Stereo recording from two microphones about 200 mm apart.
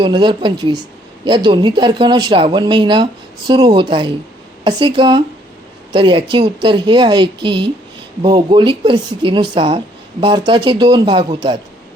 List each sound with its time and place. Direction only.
0.0 s speech: 25° right (ahead or behind)